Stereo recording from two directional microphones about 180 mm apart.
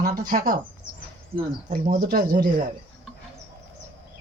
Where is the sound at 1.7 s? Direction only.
50° right (ahead or behind).